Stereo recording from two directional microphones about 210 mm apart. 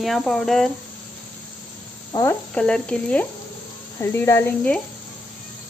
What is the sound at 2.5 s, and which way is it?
Speech, 5° left (ahead or behind).